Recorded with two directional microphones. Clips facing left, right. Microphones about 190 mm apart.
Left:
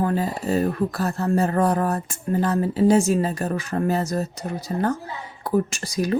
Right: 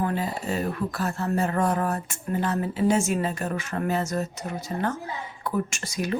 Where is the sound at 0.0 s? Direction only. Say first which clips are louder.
Left 4 dB; 40° left (ahead or behind).